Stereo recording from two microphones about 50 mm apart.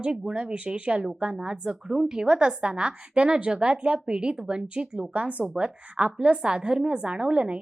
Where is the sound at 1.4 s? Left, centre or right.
Centre.